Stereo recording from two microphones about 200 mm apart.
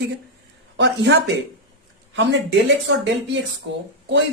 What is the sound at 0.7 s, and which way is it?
Speech, 60° right (ahead or behind).